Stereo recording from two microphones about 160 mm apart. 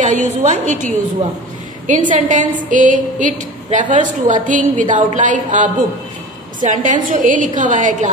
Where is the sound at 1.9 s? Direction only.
50° right (ahead or behind).